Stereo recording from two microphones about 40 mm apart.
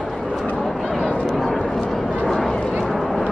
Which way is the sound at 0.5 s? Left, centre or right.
Centre.